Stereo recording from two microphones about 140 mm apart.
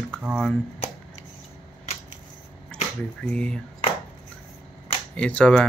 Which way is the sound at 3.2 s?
5° left (ahead or behind).